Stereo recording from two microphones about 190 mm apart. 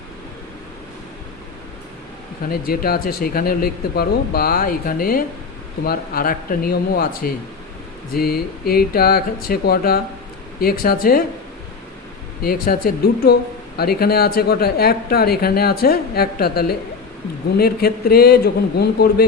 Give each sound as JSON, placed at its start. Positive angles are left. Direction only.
{"t": 2.5, "sound": "speech", "side_deg": 50}
{"t": 12.4, "sound": "speech", "side_deg": 50}